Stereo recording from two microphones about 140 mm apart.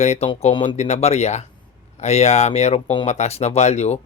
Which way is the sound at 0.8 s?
55° left (ahead or behind).